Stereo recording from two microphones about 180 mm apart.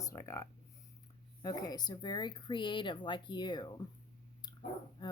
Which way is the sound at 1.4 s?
20° left (ahead or behind).